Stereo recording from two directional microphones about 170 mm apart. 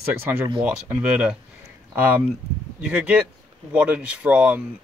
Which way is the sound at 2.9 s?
5° right (ahead or behind).